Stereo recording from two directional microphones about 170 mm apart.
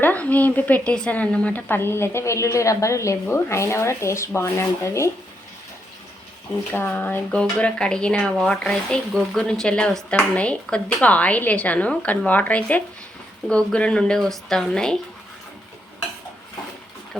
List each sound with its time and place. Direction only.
0.0 s speech: 10° left (ahead or behind)
6.7 s speech: 10° left (ahead or behind)